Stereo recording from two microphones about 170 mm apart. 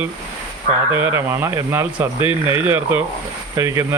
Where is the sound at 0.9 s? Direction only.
30° left (ahead or behind).